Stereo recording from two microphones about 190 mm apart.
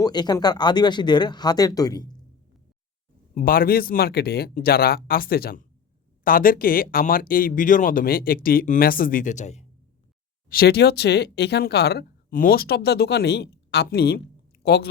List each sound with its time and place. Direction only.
0.0 s speech: 20° left (ahead or behind)
3.3 s speech: 50° left (ahead or behind)
10.5 s speech: 55° left (ahead or behind)